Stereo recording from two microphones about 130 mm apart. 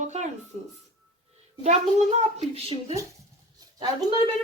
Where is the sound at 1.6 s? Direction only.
60° right (ahead or behind).